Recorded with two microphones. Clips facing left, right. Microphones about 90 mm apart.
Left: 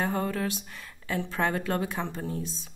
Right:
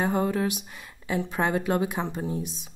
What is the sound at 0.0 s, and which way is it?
Speech, 15° right (ahead or behind).